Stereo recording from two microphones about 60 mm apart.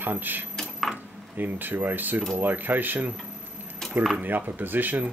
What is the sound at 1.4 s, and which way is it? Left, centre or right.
Speech, right.